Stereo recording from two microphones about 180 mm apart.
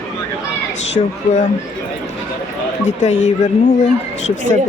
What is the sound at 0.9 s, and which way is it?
Speech, 45° left (ahead or behind).